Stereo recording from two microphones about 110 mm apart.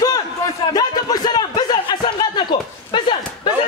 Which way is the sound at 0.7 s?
35° left (ahead or behind).